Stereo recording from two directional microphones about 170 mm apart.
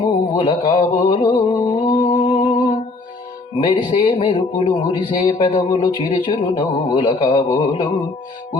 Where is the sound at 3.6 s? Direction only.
30° left (ahead or behind).